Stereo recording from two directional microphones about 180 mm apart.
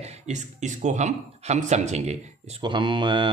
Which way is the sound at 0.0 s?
40° right (ahead or behind).